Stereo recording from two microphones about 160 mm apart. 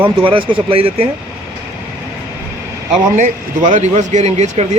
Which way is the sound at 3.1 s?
50° right (ahead or behind).